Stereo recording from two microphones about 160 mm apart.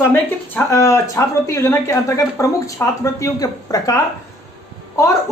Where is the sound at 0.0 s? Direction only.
10° left (ahead or behind).